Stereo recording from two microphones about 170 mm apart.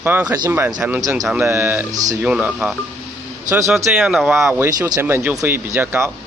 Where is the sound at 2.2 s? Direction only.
5° right (ahead or behind).